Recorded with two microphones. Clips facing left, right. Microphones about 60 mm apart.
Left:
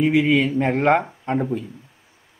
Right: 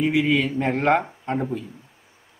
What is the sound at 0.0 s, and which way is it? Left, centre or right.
A man's voice, centre.